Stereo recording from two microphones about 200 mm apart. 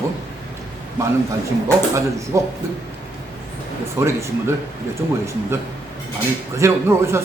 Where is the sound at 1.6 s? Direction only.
15° right (ahead or behind).